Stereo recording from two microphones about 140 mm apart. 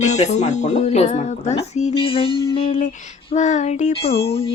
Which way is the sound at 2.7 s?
60° left (ahead or behind).